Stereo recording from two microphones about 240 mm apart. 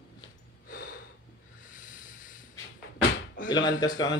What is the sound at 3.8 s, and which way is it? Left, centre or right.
Speech, centre.